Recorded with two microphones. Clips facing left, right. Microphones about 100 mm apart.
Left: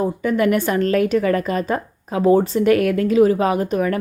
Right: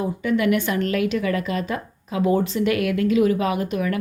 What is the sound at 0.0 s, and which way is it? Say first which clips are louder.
A woman's voice: left 3 dB; 40° left (ahead or behind).